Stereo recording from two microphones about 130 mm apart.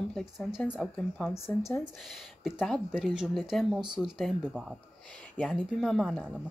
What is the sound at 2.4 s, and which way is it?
Speech, 5° left (ahead or behind).